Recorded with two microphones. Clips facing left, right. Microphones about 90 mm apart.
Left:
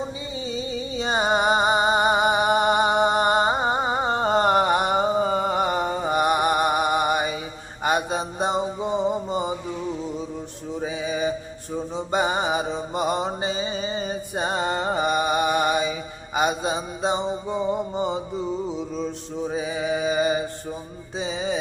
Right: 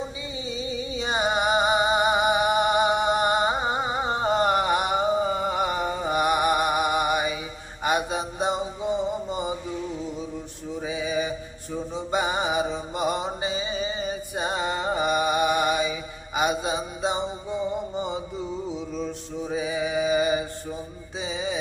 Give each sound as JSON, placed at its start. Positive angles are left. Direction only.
{"t": 0.4, "sound": "music", "side_deg": 40}
{"t": 10.8, "sound": "mantra", "side_deg": 40}
{"t": 19.5, "sound": "mantra", "side_deg": 40}
{"t": 21.2, "sound": "music", "side_deg": 35}